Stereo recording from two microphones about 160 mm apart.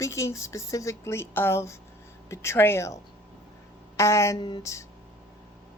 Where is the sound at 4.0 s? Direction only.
20° left (ahead or behind).